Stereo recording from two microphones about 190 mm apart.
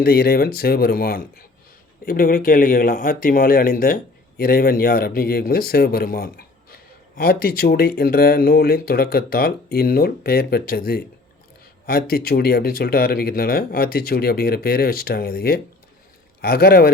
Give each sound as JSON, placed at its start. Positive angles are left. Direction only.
{"t": 0.0, "sound": "speech", "side_deg": 55}